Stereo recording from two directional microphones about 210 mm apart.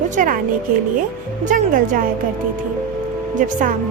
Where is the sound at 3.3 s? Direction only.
40° right (ahead or behind).